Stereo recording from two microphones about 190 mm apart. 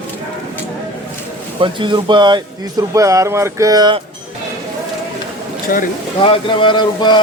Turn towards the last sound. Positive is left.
turn(degrees=25)  # may be behind; listen again after turning